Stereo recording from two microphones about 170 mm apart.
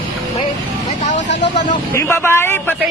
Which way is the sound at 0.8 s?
45° left (ahead or behind).